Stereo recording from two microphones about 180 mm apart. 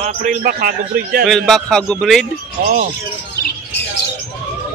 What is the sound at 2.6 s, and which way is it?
Speech, 50° right (ahead or behind).